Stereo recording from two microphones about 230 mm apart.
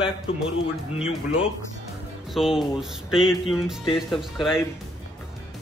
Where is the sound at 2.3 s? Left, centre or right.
Centre.